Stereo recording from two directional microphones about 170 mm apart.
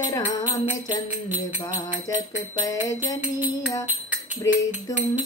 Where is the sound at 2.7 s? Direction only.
20° left (ahead or behind).